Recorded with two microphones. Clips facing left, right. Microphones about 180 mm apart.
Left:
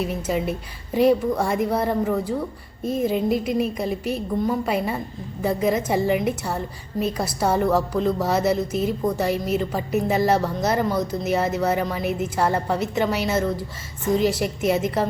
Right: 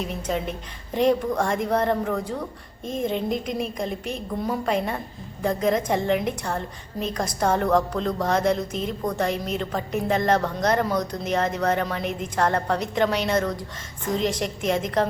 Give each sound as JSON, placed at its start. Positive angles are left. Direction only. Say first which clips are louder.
{"t": 0.0, "sound": "a woman's voice", "louder": "left 3 dB", "side_deg": 5}